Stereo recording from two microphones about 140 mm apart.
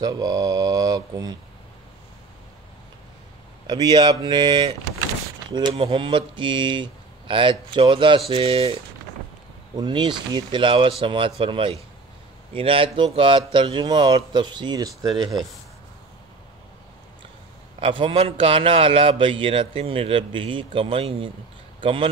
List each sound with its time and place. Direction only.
0.0 s mantra: 25° right (ahead or behind)
3.6 s a man's voice: 30° right (ahead or behind)
9.8 s a man's voice: 35° right (ahead or behind)
17.7 s a man's voice: 40° right (ahead or behind)